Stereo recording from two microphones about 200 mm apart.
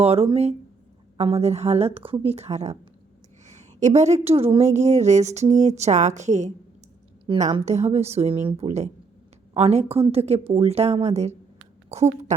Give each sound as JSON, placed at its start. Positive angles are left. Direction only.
{"t": 0.0, "sound": "speech", "side_deg": -30}
{"t": 3.4, "sound": "a sound", "side_deg": -35}
{"t": 4.4, "sound": "a woman's voice", "side_deg": -30}